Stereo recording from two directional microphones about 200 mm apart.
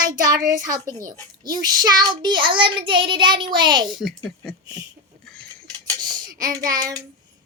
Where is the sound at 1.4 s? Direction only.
20° right (ahead or behind).